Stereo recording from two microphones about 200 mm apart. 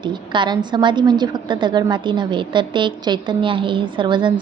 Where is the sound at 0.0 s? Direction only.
20° right (ahead or behind).